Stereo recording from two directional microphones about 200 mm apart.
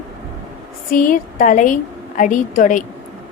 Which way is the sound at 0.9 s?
45° left (ahead or behind).